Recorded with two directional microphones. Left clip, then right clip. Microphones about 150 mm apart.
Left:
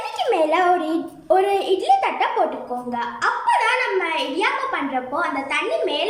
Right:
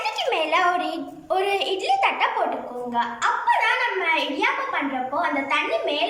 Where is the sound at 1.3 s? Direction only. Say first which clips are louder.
Left 5 dB; 45° left (ahead or behind).